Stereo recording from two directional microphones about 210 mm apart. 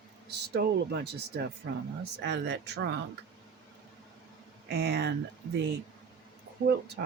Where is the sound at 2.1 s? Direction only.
55° right (ahead or behind).